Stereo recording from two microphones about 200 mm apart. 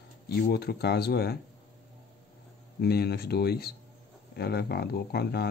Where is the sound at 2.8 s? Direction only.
50° left (ahead or behind).